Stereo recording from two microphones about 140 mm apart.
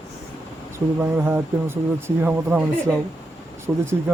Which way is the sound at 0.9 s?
15° right (ahead or behind).